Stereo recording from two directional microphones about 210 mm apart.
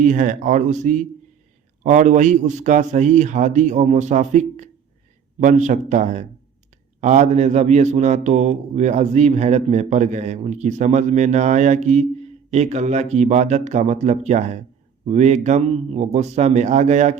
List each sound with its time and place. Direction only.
0.0 s a man's voice: 40° right (ahead or behind)